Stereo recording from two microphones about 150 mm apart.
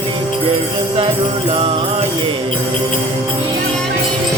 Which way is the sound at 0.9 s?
40° right (ahead or behind).